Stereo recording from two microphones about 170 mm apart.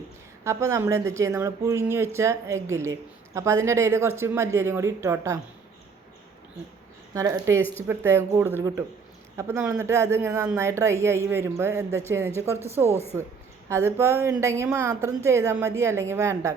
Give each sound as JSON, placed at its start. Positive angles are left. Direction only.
{"t": 0.4, "sound": "speech", "side_deg": -15}
{"t": 7.1, "sound": "speech", "side_deg": -20}